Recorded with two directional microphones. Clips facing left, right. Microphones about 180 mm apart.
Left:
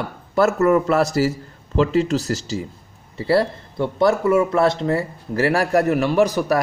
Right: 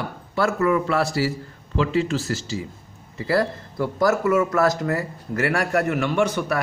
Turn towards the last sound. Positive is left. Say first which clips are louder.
# left 4 dB
turn(degrees=35)  # may be behind; listen again after turning